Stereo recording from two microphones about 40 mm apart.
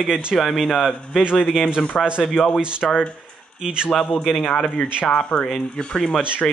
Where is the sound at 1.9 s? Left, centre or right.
Centre.